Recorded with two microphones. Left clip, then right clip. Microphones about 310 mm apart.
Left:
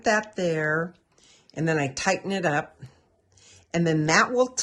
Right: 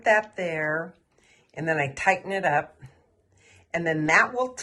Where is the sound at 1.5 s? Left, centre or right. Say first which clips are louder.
Left 3 dB; centre.